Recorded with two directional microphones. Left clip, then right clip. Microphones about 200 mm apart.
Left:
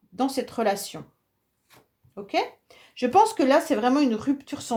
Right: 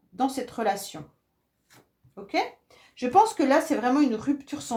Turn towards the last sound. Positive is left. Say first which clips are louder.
# left 2 dB
turn(degrees=35)  # may be behind; listen again after turning